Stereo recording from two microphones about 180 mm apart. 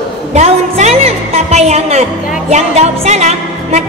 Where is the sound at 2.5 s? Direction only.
35° right (ahead or behind).